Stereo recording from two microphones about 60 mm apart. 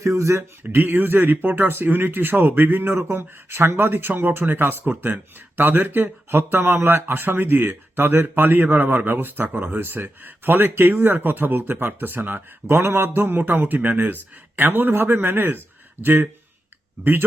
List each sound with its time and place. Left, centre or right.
0.0 s speech: right
0.7 s speech: right